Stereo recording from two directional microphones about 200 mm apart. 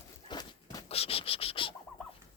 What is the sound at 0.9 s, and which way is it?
Cricket, 30° left (ahead or behind).